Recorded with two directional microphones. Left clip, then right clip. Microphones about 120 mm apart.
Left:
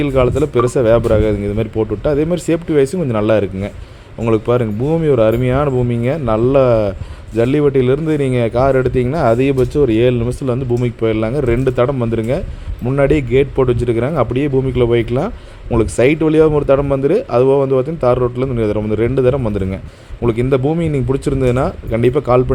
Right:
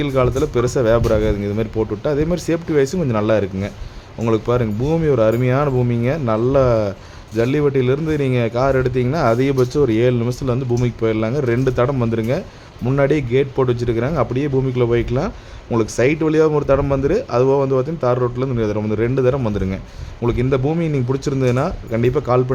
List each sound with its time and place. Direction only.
0.0 s speech: 15° left (ahead or behind)